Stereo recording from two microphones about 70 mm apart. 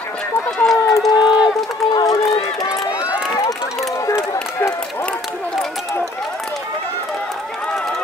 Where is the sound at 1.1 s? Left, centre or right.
Centre.